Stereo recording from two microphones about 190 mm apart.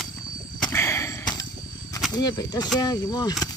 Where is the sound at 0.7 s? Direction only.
15° left (ahead or behind).